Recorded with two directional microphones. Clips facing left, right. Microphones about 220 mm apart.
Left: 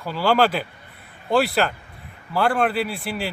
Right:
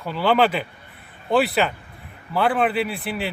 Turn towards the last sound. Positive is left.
turn(degrees=0)  # may be behind; listen again after turning